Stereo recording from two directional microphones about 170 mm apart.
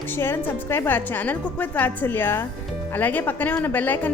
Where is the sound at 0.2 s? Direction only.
15° left (ahead or behind).